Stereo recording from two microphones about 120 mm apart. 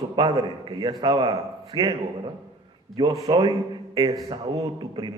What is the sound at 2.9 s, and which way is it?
A man's voice, 30° right (ahead or behind).